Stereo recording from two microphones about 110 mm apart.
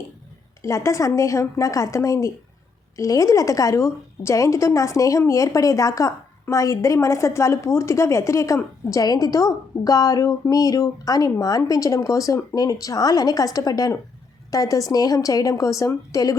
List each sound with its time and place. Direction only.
0.6 s a woman's voice: 25° left (ahead or behind)